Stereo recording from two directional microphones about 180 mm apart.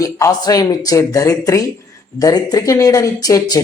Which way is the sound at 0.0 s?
20° left (ahead or behind).